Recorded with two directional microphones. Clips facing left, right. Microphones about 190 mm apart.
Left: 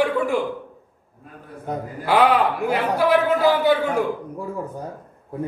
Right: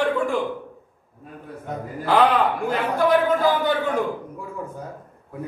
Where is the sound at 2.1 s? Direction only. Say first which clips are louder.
Left 1 dB; 10° left (ahead or behind).